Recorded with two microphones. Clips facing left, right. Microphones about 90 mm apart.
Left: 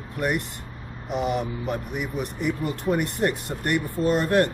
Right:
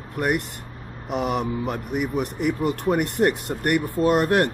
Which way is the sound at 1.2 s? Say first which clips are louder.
Right 2 dB; 60° right (ahead or behind).